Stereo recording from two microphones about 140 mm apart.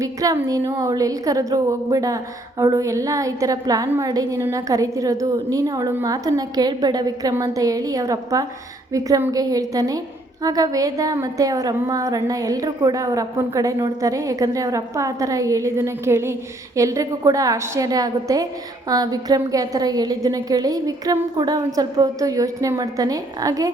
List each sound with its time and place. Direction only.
0.0 s a woman's voice: 25° right (ahead or behind)